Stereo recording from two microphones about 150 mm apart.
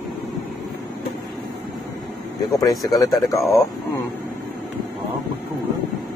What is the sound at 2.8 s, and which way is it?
Speech, 25° left (ahead or behind).